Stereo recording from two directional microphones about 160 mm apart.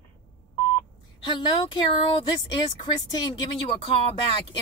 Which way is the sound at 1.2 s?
30° left (ahead or behind).